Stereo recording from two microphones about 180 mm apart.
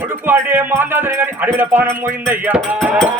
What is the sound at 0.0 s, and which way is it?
Speech, 10° right (ahead or behind).